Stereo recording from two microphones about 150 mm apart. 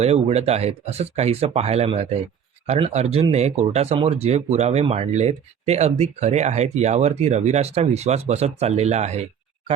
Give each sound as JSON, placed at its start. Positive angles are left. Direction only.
{"t": 0.0, "sound": "speech", "side_deg": -45}